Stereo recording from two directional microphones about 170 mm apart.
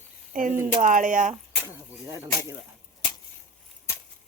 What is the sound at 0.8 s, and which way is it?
Speech, 50° right (ahead or behind).